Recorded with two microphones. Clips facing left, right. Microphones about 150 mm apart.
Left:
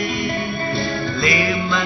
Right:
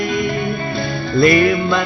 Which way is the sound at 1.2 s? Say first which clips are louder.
Right 8 dB; 55° right (ahead or behind).